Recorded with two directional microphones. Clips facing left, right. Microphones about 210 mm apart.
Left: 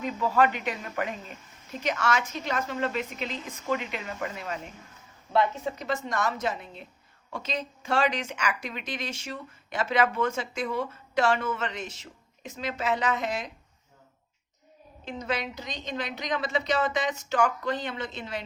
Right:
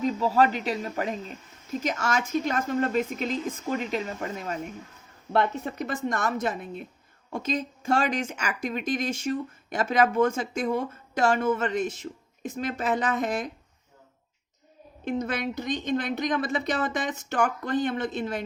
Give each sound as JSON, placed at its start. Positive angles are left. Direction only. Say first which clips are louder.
{"t": 0.0, "sound": "speech", "louder": "right 2 dB", "side_deg": -40}
{"t": 5.3, "sound": "speech", "louder": "even", "side_deg": -55}
{"t": 15.0, "sound": "speech", "louder": "right 4 dB", "side_deg": -55}